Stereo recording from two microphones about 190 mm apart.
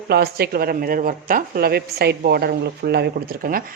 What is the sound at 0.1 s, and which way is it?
Speech, 55° right (ahead or behind).